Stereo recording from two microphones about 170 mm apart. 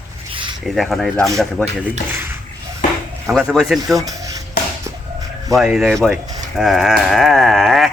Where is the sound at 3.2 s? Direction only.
Centre (ahead or behind).